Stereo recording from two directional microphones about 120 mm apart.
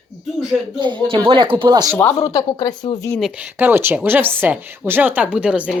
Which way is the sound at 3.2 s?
10° right (ahead or behind).